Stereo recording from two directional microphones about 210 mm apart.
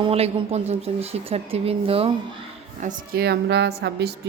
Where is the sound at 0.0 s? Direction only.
25° right (ahead or behind).